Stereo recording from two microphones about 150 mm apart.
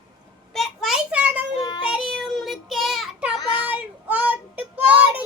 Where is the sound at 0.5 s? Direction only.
Centre (ahead or behind).